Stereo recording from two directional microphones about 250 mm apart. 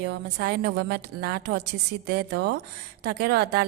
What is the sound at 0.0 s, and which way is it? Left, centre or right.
A woman's voice, right.